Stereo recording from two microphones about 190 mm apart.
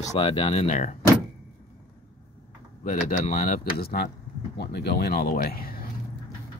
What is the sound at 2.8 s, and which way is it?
Speech, 45° left (ahead or behind).